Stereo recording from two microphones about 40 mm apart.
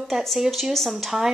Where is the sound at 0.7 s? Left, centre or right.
Centre.